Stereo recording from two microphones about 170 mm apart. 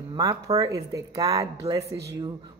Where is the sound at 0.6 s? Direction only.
20° right (ahead or behind).